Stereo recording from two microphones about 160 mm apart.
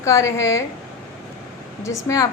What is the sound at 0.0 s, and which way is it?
Speech, 20° left (ahead or behind).